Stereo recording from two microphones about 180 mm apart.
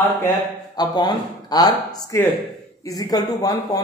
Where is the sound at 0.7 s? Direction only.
25° left (ahead or behind).